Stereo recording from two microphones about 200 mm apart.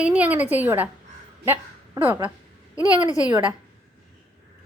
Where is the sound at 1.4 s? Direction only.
10° right (ahead or behind).